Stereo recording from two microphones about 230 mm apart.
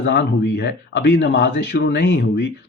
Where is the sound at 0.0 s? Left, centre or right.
Left.